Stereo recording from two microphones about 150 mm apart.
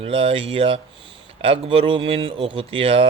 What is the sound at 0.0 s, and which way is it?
Speech, 35° right (ahead or behind).